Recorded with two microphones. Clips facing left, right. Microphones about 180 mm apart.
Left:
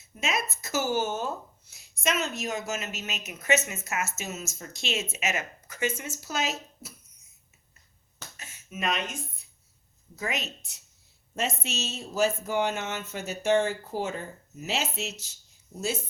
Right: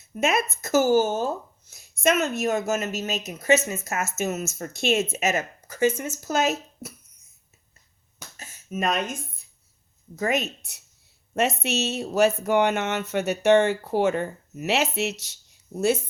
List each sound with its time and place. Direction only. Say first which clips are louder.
0.1 s speech: right 7 dB; 55° right (ahead or behind); by 1.3 s 35° right (ahead or behind)
1.7 s speech: right 7 dB; 55° right (ahead or behind)
8.4 s a sound: right 7 dB; 45° right (ahead or behind)
10.2 s speech: right 8 dB; 50° right (ahead or behind)